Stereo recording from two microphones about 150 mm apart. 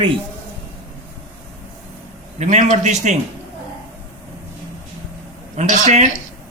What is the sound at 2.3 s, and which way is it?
Speech, 50° right (ahead or behind).